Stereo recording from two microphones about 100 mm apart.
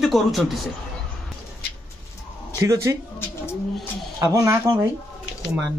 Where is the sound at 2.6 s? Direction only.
30° right (ahead or behind).